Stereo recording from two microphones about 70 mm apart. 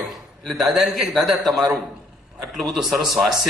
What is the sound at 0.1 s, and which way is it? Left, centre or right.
A man's voice, centre.